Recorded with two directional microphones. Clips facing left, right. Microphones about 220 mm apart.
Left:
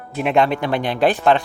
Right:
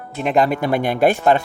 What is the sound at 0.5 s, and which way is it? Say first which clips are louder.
Speech: right 2 dB; 45° right (ahead or behind).